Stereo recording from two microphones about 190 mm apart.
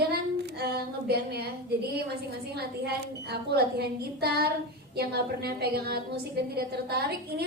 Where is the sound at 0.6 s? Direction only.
55° right (ahead or behind).